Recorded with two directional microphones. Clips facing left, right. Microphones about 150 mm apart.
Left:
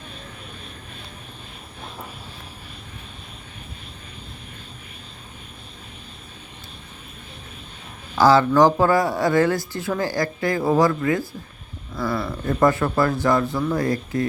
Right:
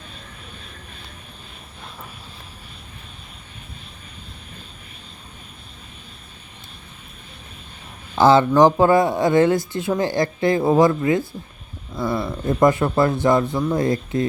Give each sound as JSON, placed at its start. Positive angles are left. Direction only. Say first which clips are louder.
{"t": 8.1, "sound": "speech", "louder": "right 1 dB", "side_deg": -20}